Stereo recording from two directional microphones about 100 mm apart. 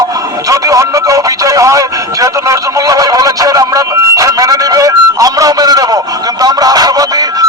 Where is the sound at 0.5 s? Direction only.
35° right (ahead or behind).